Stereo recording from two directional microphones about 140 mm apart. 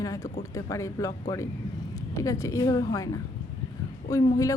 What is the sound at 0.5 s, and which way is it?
Speech, 20° left (ahead or behind).